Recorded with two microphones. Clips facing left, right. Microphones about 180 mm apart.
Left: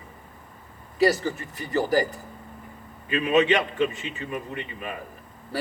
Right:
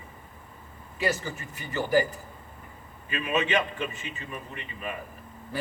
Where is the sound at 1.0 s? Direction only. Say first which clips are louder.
Left 8 dB; 35° left (ahead or behind).